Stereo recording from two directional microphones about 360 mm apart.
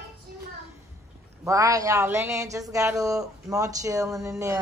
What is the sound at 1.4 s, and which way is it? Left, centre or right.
Speech, centre.